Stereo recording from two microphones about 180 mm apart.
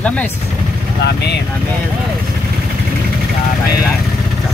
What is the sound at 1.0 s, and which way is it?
Speech, 65° left (ahead or behind).